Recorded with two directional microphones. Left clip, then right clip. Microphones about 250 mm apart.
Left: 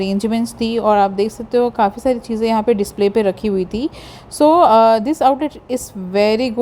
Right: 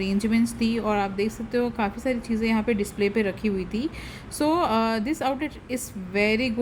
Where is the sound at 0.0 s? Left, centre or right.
Left.